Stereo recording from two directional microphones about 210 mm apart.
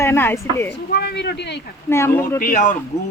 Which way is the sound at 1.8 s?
10° left (ahead or behind).